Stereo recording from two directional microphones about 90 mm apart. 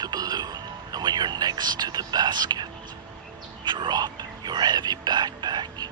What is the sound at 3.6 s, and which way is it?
Speech, 60° right (ahead or behind).